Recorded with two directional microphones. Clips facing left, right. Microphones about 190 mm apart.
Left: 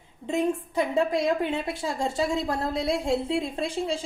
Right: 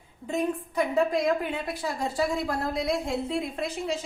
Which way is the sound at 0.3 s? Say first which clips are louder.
Left 2 dB; 25° left (ahead or behind).